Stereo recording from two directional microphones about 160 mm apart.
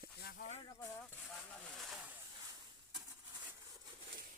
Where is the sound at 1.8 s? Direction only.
Centre (ahead or behind).